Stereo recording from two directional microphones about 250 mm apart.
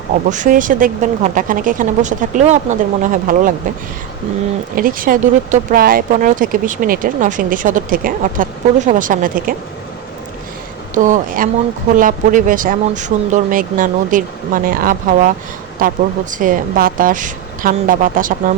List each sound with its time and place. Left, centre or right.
0.3 s speech: right
4.7 s speech: right
10.9 s speech: right